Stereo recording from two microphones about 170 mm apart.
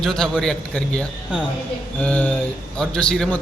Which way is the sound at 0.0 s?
5° left (ahead or behind).